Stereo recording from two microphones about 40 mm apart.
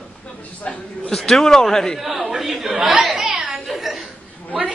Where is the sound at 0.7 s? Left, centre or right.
Centre.